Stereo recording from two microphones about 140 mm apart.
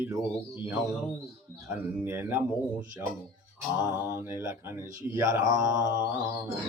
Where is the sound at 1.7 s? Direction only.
15° right (ahead or behind).